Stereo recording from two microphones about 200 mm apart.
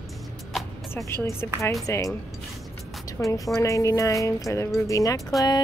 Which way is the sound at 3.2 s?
10° left (ahead or behind).